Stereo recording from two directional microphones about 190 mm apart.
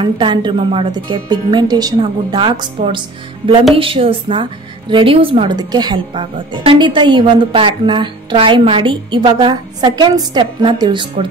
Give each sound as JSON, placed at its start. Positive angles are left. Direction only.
{"t": 0.0, "sound": "speech", "side_deg": -25}